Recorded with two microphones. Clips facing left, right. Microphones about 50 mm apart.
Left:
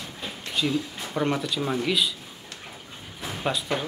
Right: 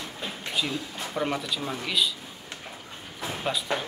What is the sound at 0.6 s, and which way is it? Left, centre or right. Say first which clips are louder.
Speech: left 5 dB; centre.